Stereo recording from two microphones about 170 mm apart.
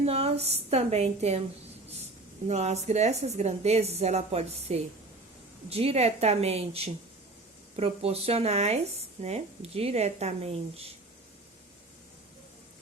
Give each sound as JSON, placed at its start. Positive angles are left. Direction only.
{"t": 0.0, "sound": "a woman's voice", "side_deg": -35}
{"t": 2.5, "sound": "a woman's voice", "side_deg": -40}